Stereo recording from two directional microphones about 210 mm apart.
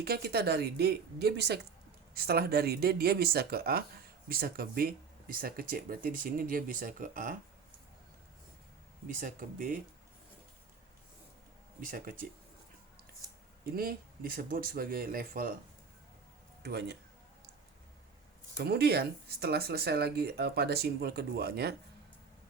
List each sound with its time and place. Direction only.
0.0 s speech: 50° right (ahead or behind)
9.0 s speech: 40° right (ahead or behind)
11.8 s speech: 40° right (ahead or behind)
13.7 s speech: 45° right (ahead or behind)
16.6 s speech: 50° right (ahead or behind)
18.5 s speech: 50° right (ahead or behind)